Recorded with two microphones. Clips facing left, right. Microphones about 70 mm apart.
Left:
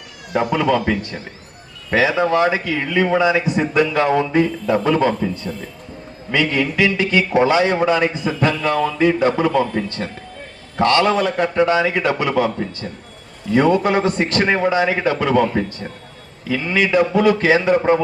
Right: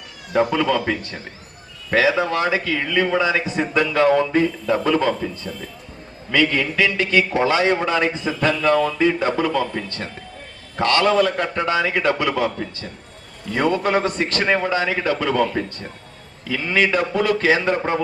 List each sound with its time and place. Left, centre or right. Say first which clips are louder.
0.3 s a man's voice: left 1 dB; centre
6.3 s a man's voice: left 1 dB; centre
11.0 s a man's voice: even; centre
13.5 s a man's voice: left 4 dB; centre
14.4 s a man's voice: left 3 dB; centre
17.4 s a man's voice: left 4 dB; centre